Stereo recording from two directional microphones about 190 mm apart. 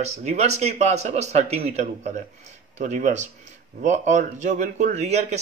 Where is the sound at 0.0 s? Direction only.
35° right (ahead or behind).